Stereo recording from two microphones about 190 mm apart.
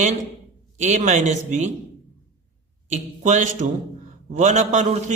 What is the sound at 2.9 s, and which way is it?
A man's voice, 40° right (ahead or behind).